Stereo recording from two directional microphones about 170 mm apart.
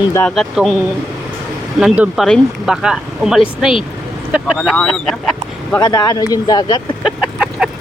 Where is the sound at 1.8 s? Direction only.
5° right (ahead or behind).